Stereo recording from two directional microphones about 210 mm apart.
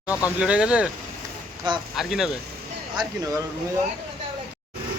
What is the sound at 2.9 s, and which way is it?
Speech, 15° right (ahead or behind).